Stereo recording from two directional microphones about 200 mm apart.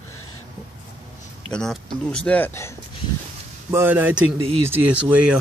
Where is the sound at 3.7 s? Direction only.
10° right (ahead or behind).